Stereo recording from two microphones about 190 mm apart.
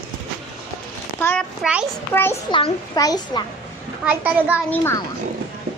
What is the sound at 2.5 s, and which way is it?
Speech, 20° left (ahead or behind).